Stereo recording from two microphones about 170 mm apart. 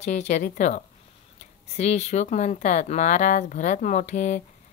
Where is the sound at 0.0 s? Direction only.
45° left (ahead or behind).